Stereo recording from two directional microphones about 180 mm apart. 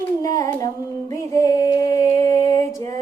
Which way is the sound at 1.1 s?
20° left (ahead or behind).